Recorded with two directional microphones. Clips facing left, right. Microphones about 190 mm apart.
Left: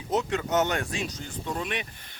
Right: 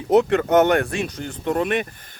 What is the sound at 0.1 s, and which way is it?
Speech, 60° right (ahead or behind).